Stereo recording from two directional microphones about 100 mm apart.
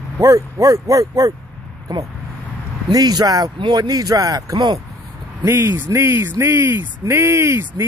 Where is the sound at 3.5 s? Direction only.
50° right (ahead or behind).